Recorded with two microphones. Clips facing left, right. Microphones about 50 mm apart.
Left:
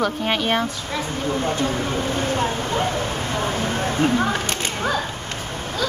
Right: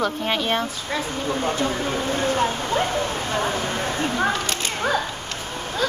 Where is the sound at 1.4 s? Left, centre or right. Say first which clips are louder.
Right 1 dB; centre.